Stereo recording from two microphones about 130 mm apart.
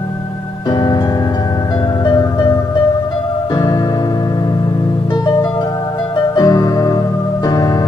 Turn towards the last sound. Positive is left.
turn(degrees=25)  # may be behind; listen again after turning